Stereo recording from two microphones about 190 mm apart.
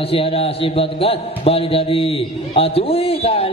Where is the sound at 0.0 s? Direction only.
30° left (ahead or behind).